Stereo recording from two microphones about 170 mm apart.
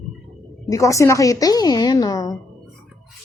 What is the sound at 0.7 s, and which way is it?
A woman's voice, 20° left (ahead or behind).